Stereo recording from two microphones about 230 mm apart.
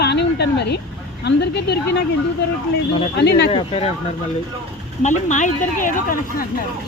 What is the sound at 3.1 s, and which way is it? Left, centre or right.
Speech, left.